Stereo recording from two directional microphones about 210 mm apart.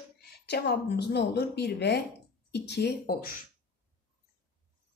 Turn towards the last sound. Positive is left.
turn(degrees=45)  # may be behind; listen again after turning